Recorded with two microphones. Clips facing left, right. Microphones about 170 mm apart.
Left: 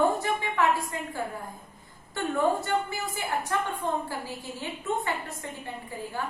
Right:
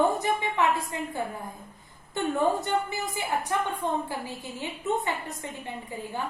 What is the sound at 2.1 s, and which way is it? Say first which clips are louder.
A woman's voice: right 1 dB; 20° right (ahead or behind).